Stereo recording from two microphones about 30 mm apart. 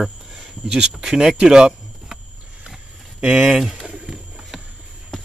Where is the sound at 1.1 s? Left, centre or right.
Centre.